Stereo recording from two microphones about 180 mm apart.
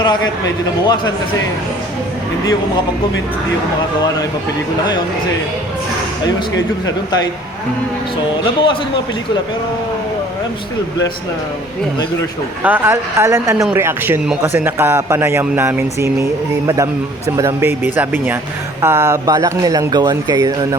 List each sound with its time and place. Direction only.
0.0 s a man's voice: 25° left (ahead or behind)
12.6 s a man's voice: 10° right (ahead or behind)